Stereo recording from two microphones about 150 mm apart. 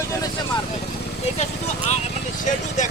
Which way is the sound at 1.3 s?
45° left (ahead or behind).